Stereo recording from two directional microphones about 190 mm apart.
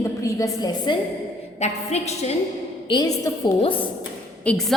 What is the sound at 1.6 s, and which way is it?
Speech, 35° left (ahead or behind).